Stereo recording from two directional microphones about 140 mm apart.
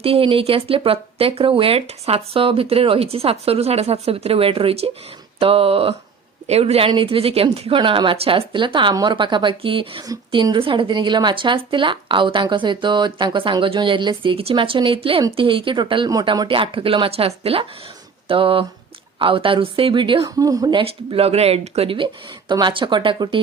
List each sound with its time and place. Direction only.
0.0 s speech: 40° right (ahead or behind)
20.2 s speech: 25° right (ahead or behind)